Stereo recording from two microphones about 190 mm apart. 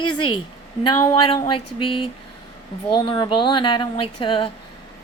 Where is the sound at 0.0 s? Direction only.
25° left (ahead or behind).